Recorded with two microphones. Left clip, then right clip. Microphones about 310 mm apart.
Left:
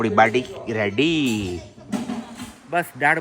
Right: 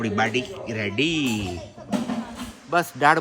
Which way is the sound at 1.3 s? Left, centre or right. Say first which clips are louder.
Left 2 dB; centre.